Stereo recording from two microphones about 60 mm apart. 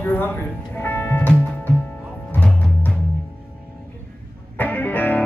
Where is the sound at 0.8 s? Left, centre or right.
Left.